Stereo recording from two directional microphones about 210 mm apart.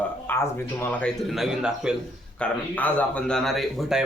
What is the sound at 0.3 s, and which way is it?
Speech, 10° left (ahead or behind).